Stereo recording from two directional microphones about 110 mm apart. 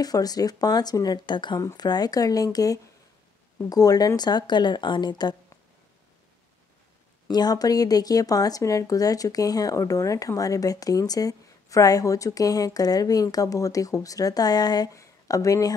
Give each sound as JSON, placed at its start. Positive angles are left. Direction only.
{"t": 0.0, "sound": "speech", "side_deg": 35}
{"t": 7.2, "sound": "speech", "side_deg": 40}